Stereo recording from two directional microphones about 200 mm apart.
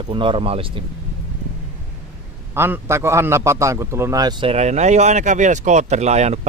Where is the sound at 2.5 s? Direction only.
10° right (ahead or behind).